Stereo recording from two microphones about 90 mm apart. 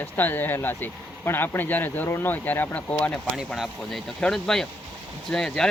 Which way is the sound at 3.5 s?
Centre (ahead or behind).